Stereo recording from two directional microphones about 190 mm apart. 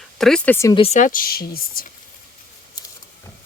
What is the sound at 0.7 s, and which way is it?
Speech, 30° left (ahead or behind).